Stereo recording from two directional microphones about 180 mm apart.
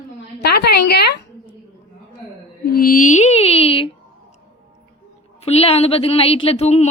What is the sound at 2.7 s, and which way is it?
A woman's voice, 50° left (ahead or behind).